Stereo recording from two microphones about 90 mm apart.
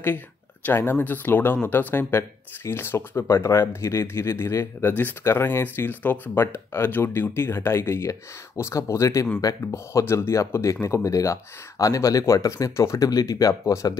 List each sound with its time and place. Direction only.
0.7 s speech: 25° left (ahead or behind); by 13.9 s 40° left (ahead or behind)